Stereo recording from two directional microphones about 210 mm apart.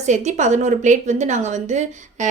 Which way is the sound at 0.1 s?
35° right (ahead or behind).